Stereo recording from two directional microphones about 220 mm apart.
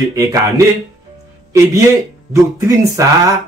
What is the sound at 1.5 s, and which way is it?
Speech, 15° right (ahead or behind).